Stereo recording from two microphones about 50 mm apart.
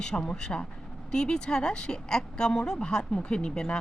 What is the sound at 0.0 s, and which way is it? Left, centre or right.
Speech, centre.